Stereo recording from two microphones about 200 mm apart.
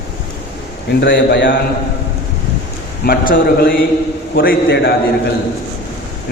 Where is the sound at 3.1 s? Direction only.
45° left (ahead or behind).